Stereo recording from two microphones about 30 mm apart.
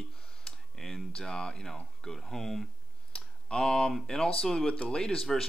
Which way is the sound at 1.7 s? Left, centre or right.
Centre.